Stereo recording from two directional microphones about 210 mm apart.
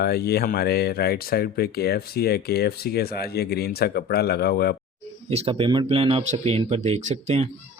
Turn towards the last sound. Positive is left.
turn(degrees=-35)  # may be behind; listen again after turning